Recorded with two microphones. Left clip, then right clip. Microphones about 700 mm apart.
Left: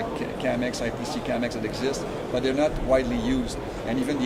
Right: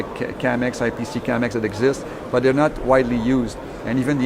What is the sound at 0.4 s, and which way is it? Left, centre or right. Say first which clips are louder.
Speech: right 6 dB; right.